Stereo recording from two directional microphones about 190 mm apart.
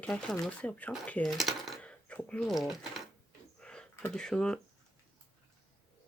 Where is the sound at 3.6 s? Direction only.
5° left (ahead or behind).